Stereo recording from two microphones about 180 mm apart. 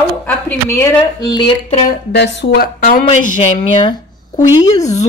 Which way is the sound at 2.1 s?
75° left (ahead or behind).